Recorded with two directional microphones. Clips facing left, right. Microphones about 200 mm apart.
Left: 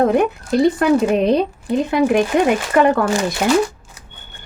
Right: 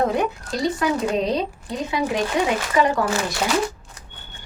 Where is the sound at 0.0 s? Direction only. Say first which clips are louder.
Left 6 dB; 55° left (ahead or behind).